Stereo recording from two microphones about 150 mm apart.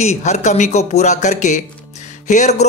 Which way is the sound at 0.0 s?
50° left (ahead or behind).